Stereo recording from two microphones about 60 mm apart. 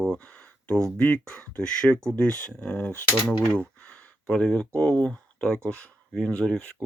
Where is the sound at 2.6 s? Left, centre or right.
Left.